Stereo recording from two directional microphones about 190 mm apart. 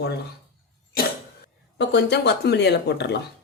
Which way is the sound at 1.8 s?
65° left (ahead or behind).